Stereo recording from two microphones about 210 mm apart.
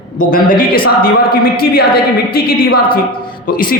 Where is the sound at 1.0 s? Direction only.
45° left (ahead or behind).